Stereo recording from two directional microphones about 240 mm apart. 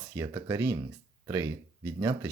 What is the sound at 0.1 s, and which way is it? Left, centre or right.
Speech, centre.